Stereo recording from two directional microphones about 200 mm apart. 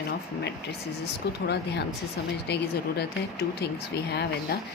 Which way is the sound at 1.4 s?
55° left (ahead or behind).